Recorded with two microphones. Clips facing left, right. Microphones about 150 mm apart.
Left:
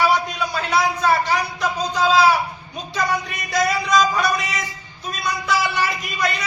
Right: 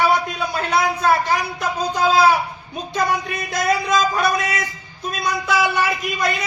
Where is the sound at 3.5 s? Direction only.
55° right (ahead or behind).